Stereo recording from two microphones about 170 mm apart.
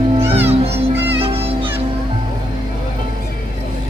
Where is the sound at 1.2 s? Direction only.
35° right (ahead or behind).